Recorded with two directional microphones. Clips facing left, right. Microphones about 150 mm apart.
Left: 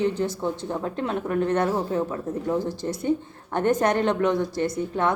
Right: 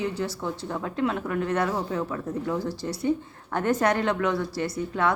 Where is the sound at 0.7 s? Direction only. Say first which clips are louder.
Even; 25° left (ahead or behind).